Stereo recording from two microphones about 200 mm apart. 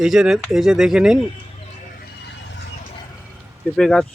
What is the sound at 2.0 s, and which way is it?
Vehicle, 55° left (ahead or behind).